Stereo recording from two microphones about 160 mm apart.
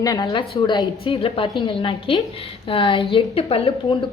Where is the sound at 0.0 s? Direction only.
25° left (ahead or behind).